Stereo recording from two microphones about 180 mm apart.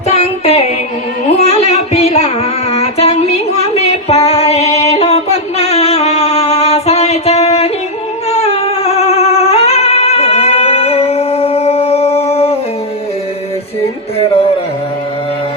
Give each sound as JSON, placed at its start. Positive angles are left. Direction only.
{"t": 0.1, "sound": "child singing", "side_deg": 35}
{"t": 1.4, "sound": "music", "side_deg": 35}
{"t": 4.3, "sound": "singing", "side_deg": 35}
{"t": 8.3, "sound": "music", "side_deg": 35}